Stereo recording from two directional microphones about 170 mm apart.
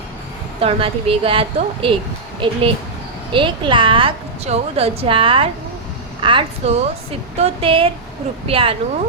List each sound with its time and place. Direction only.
0.6 s a woman's voice: 35° right (ahead or behind)